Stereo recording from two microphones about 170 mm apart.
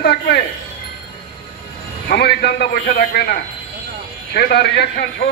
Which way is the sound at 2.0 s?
75° left (ahead or behind).